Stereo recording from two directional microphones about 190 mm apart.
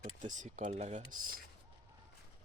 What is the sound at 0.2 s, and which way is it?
Speech, 40° right (ahead or behind).